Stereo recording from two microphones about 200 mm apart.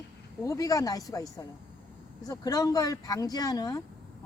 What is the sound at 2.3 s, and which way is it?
Speech, 20° left (ahead or behind).